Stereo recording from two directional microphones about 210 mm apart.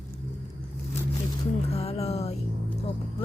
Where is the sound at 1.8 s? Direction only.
30° left (ahead or behind).